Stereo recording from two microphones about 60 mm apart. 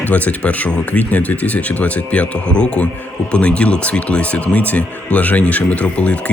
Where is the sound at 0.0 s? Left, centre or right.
Left.